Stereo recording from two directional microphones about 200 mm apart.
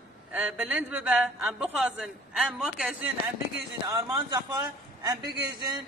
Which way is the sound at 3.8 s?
20° right (ahead or behind).